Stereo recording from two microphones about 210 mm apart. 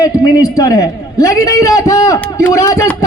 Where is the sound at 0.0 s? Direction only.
15° left (ahead or behind).